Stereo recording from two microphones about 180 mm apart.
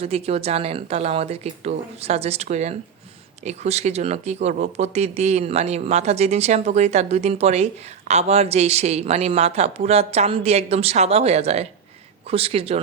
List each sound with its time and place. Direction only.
0.0 s speech: 35° right (ahead or behind)